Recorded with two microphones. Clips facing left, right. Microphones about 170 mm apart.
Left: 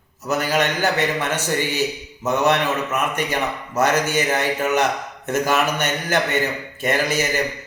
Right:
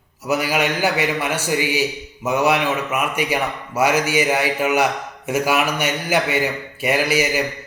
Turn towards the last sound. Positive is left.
turn(degrees=-10)  # may be behind; listen again after turning